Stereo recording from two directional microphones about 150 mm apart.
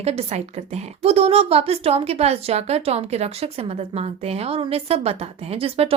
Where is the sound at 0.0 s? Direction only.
45° right (ahead or behind).